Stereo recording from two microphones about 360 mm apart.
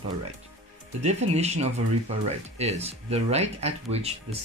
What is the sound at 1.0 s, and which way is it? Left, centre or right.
Speech, centre.